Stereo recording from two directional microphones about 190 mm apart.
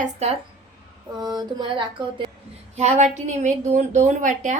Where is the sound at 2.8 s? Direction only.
35° right (ahead or behind).